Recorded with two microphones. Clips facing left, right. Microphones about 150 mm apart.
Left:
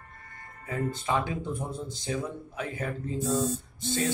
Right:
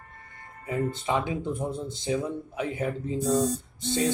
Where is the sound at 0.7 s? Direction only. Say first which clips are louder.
Right 2 dB; 20° right (ahead or behind).